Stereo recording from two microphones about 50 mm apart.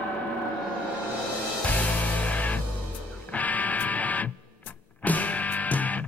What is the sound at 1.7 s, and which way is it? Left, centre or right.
Music, left.